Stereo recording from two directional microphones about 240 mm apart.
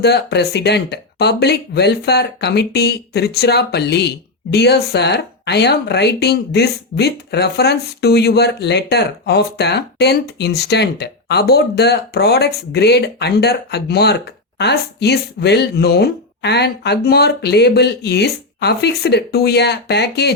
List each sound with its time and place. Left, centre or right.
0.0 s speech: left